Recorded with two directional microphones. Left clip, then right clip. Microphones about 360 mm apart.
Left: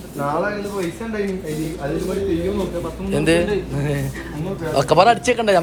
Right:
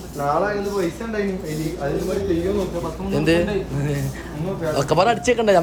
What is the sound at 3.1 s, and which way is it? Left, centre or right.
Speech, centre.